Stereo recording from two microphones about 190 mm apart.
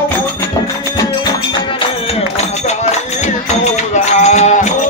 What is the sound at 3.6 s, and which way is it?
Music, 35° left (ahead or behind).